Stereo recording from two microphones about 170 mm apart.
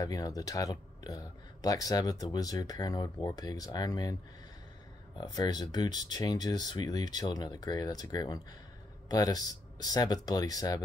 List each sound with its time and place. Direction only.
0.0 s speech: 20° left (ahead or behind)